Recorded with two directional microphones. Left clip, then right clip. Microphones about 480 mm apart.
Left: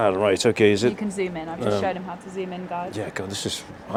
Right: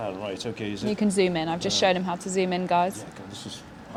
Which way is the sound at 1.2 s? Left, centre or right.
Right.